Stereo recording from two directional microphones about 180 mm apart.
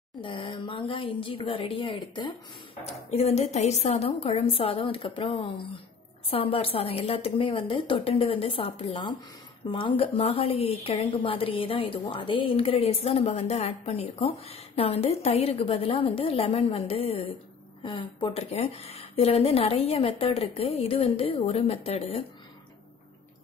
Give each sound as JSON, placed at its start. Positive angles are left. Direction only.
{"t": 0.2, "sound": "speech", "side_deg": 25}
{"t": 2.8, "sound": "a woman's voice", "side_deg": 35}